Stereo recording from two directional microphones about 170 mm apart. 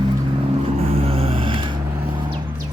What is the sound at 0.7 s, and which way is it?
Vehicle, 35° right (ahead or behind).